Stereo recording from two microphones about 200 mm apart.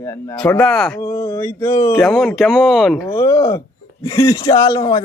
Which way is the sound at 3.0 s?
15° left (ahead or behind).